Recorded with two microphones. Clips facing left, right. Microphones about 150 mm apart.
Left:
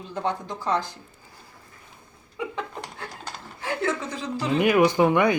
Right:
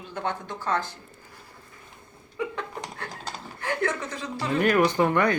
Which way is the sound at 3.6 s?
10° left (ahead or behind).